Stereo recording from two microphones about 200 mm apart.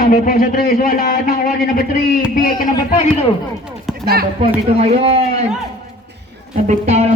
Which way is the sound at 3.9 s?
Centre (ahead or behind).